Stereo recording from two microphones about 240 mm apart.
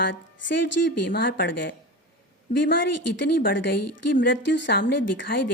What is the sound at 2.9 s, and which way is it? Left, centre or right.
Speech, left.